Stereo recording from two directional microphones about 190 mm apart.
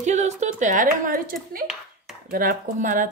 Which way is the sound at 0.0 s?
35° right (ahead or behind).